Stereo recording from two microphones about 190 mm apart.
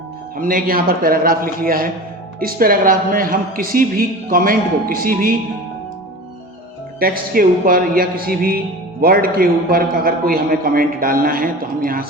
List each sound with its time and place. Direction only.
0.3 s a man's voice: 50° right (ahead or behind)
7.0 s a man's voice: 50° right (ahead or behind)